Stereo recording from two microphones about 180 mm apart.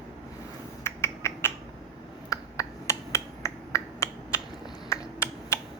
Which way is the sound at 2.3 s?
15° left (ahead or behind).